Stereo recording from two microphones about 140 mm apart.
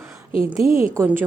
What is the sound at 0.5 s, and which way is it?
Speech, 20° right (ahead or behind).